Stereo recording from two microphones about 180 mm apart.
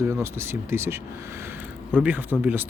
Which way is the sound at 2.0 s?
10° right (ahead or behind).